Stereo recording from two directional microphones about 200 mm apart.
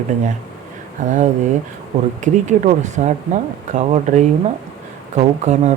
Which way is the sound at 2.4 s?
35° right (ahead or behind).